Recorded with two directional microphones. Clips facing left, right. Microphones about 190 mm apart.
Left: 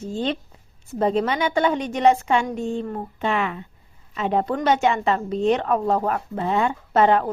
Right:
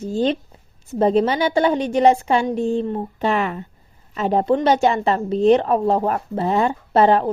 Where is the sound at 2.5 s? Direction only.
35° right (ahead or behind).